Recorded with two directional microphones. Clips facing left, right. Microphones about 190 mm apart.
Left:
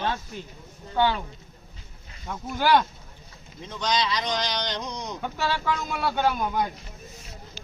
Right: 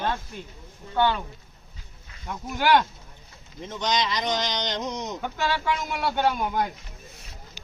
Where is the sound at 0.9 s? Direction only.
15° left (ahead or behind).